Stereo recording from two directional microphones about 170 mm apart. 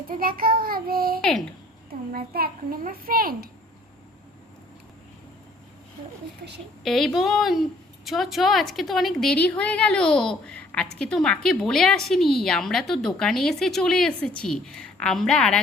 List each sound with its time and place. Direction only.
0.1 s a child's voice: 55° right (ahead or behind)
6.8 s a woman's voice: centre (ahead or behind)